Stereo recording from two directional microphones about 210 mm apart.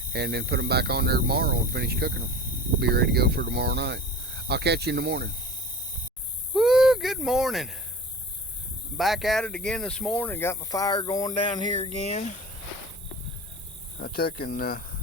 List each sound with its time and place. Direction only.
0.1 s speech: 50° right (ahead or behind)
6.5 s speech: centre (ahead or behind)
9.0 s speech: centre (ahead or behind); by 11.9 s 20° left (ahead or behind)
12.0 s speech: 35° left (ahead or behind)
14.0 s speech: 45° left (ahead or behind)